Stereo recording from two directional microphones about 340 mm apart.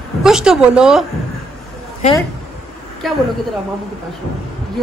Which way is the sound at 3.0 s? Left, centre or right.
Centre.